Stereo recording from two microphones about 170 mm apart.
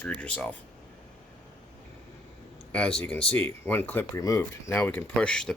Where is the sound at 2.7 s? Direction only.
5° left (ahead or behind).